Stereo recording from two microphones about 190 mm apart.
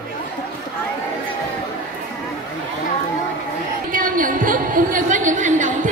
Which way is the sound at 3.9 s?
45° right (ahead or behind).